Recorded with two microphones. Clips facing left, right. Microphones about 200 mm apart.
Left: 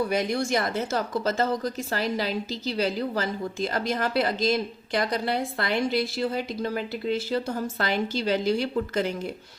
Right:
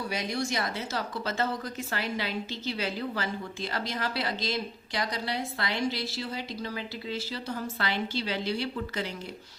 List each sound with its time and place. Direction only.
0.1 s a woman's voice: 55° left (ahead or behind)